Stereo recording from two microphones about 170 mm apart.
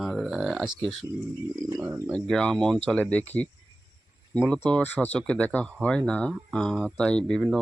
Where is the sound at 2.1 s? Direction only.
5° left (ahead or behind).